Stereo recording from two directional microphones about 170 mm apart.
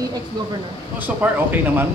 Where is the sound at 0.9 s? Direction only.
10° right (ahead or behind).